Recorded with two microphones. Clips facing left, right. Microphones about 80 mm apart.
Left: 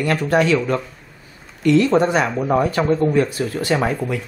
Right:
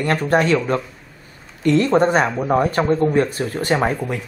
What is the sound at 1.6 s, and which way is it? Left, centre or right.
Speech, right.